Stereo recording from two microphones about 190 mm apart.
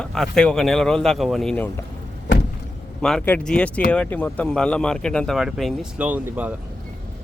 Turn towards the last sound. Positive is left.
turn(degrees=-10)  # may be behind; listen again after turning